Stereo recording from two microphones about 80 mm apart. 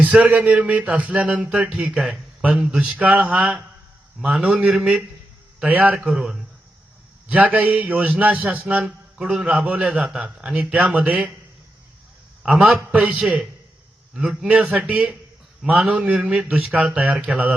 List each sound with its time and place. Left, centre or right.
0.1 s a man's voice: centre
6.0 s a man's voice: centre
7.3 s a man's voice: centre
12.4 s a man's voice: centre